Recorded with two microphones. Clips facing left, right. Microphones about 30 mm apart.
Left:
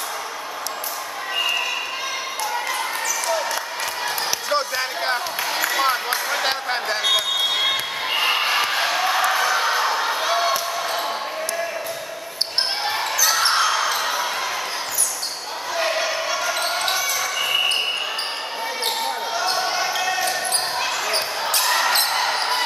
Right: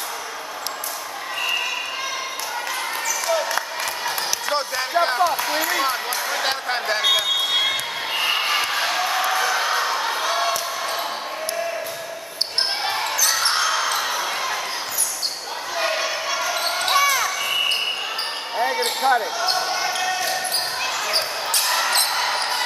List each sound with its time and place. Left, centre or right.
3.3 s basketball bounce: centre
4.5 s a sound: centre
6.3 s basketball bounce: centre
12.8 s basketball bounce: centre
15.7 s basketball bounce: centre
16.9 s basketball bounce: centre
19.5 s basketball bounce: centre
21.5 s basketball bounce: centre